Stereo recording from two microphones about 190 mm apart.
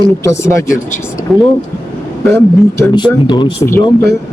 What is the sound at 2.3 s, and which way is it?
Speech, 15° left (ahead or behind).